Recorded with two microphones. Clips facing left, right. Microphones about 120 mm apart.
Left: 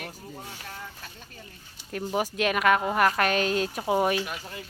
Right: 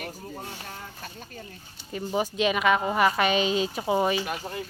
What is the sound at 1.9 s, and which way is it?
Speech, centre (ahead or behind).